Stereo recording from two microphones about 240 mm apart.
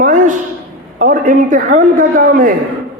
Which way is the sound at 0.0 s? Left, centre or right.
Right.